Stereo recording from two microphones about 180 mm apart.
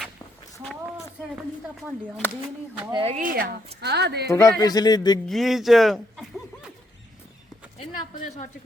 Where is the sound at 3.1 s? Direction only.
50° right (ahead or behind).